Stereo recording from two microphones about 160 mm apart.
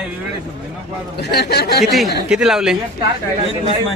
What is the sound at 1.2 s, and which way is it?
Speech, 80° left.